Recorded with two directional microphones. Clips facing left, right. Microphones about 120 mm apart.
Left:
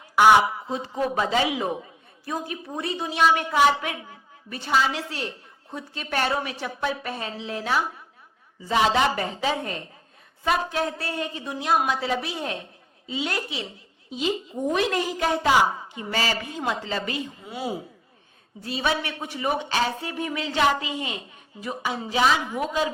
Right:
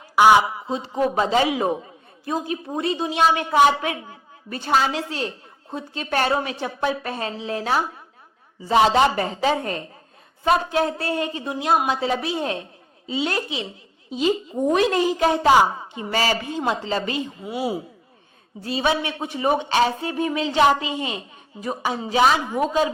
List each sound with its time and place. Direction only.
0.7 s a woman's voice: 25° right (ahead or behind)
10.9 s speech: 50° right (ahead or behind)
11.4 s a woman's voice: 35° right (ahead or behind)
14.7 s speech: 30° right (ahead or behind)
17.4 s speech: 10° right (ahead or behind)
18.6 s a woman's voice: 25° right (ahead or behind)